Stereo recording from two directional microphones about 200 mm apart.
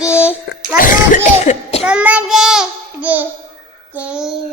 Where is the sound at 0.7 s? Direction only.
45° left (ahead or behind).